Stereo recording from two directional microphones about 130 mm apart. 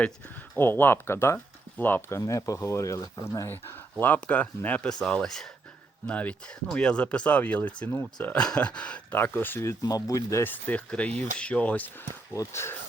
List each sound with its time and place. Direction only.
0.5 s speech: 15° left (ahead or behind)
3.9 s speech: 10° left (ahead or behind)
11.1 s speech: 65° right (ahead or behind)
11.3 s speech: 10° left (ahead or behind)
12.3 s speech: 20° left (ahead or behind)